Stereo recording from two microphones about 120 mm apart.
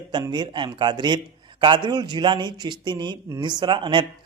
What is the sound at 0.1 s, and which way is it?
A man's voice, 35° right (ahead or behind).